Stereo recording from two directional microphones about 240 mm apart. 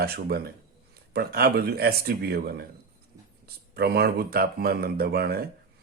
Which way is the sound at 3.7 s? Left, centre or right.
Right.